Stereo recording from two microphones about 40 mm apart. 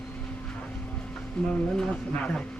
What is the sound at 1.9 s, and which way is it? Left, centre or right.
Speech, left.